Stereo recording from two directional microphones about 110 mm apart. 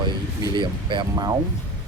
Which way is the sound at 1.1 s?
35° right (ahead or behind).